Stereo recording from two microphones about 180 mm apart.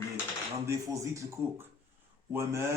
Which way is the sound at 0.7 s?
15° right (ahead or behind).